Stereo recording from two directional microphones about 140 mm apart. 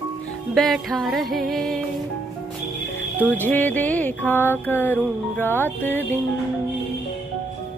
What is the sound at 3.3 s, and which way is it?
Mantra, 15° left (ahead or behind).